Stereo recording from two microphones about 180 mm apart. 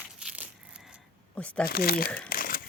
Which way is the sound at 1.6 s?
60° left (ahead or behind).